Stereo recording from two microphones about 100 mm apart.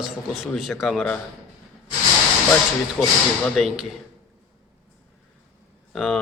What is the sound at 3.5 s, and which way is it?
Speech, 5° right (ahead or behind).